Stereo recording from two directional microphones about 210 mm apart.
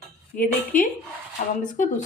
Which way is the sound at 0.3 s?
40° left (ahead or behind).